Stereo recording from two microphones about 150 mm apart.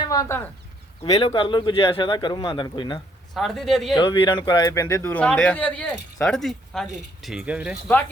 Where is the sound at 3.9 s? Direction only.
30° left (ahead or behind).